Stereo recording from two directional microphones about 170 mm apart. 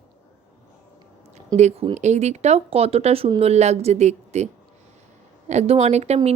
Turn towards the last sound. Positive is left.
turn(degrees=-40)  # may be behind; listen again after turning